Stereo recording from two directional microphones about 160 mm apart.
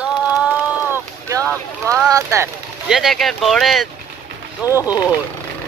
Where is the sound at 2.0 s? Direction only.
20° right (ahead or behind).